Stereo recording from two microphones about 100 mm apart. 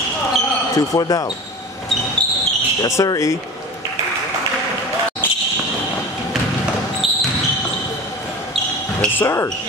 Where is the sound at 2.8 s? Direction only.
35° left (ahead or behind).